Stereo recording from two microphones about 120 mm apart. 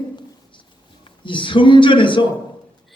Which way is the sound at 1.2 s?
45° left (ahead or behind).